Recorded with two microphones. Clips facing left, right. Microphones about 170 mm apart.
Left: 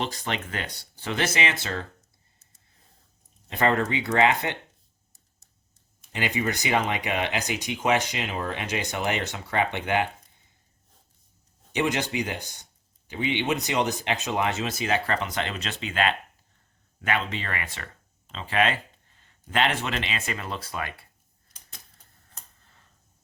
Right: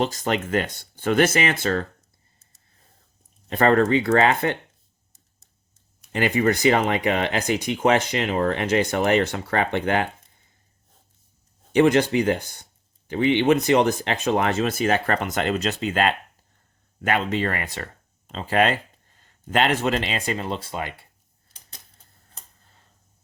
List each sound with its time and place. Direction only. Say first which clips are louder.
0.0 s speech: right 7 dB; 45° right (ahead or behind)
3.5 s speech: right 6 dB; 50° right (ahead or behind)
6.1 s speech: right 7 dB; 50° right (ahead or behind)
11.7 s speech: right 9 dB; 50° right (ahead or behind); by 21.1 s 25° right (ahead or behind)